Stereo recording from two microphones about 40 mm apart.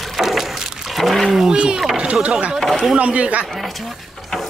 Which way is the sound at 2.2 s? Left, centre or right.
Right.